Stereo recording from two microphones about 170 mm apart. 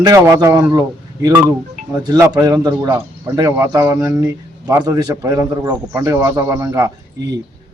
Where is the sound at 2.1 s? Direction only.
20° right (ahead or behind).